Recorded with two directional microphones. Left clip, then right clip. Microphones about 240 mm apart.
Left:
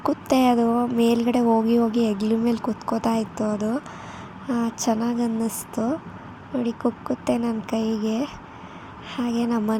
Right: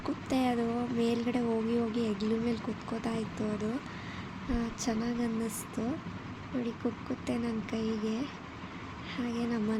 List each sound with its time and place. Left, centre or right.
0.0 s speech: left